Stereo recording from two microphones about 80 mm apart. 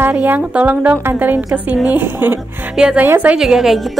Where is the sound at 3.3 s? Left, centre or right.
Centre.